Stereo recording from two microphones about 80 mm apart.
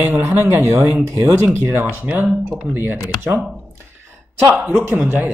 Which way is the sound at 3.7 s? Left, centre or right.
Right.